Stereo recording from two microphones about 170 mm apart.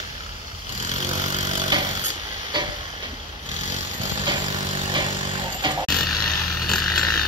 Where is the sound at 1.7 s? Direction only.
25° right (ahead or behind).